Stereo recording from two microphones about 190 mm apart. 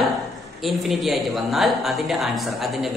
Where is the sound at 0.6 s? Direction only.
Centre (ahead or behind).